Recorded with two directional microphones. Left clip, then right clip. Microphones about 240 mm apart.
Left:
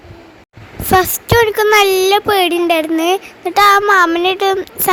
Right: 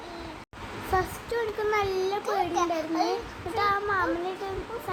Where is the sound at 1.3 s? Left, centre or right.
Left.